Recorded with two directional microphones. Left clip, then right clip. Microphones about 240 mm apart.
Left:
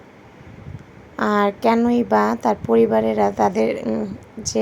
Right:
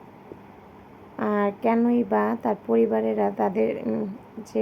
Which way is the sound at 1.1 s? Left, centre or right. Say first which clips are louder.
Left 6 dB; centre.